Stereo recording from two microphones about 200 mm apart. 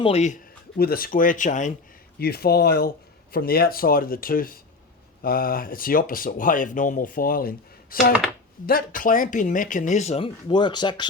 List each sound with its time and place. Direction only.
0.0 s speech: 35° left (ahead or behind)
0.8 s speech: 50° left (ahead or behind)
2.1 s speech: 50° left (ahead or behind); by 11.0 s 20° left (ahead or behind)